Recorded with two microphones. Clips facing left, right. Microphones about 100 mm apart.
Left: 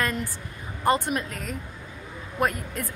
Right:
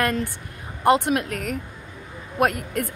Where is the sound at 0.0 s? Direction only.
65° right (ahead or behind).